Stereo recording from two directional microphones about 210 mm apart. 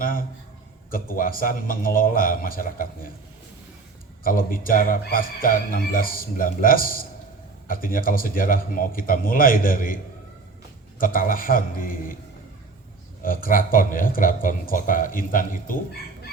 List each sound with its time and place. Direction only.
0.0 s a sound: 40° left (ahead or behind)
0.9 s speech: 40° left (ahead or behind)
4.2 s a man's voice: 40° left (ahead or behind)
13.2 s speech: 40° left (ahead or behind)